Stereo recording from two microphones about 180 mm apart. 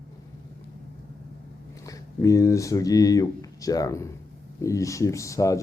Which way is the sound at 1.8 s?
15° left (ahead or behind).